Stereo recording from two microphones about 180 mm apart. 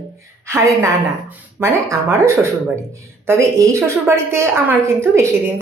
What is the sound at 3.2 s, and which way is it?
A woman's voice, 15° right (ahead or behind).